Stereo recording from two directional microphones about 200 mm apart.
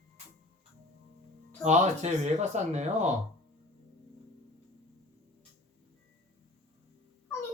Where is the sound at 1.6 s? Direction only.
35° right (ahead or behind).